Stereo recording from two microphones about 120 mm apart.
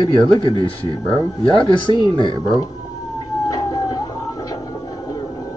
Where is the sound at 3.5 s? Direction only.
30° left (ahead or behind).